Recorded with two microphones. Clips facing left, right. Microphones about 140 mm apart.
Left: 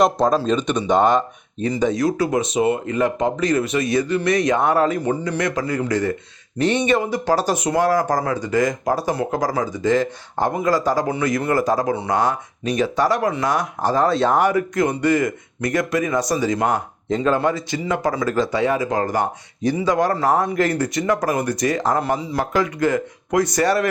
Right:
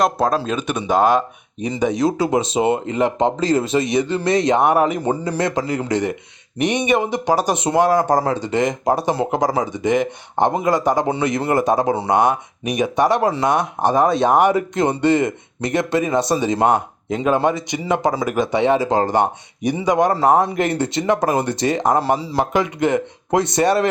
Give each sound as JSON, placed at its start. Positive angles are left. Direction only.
{"t": 0.0, "sound": "speech", "side_deg": -5}
{"t": 17.1, "sound": "speech", "side_deg": -10}
{"t": 17.3, "sound": "speech", "side_deg": -20}